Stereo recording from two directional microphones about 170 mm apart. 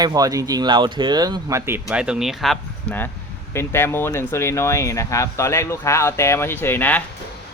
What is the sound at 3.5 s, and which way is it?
Speech, 15° left (ahead or behind).